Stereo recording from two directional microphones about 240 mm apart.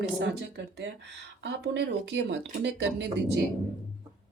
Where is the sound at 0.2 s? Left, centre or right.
Right.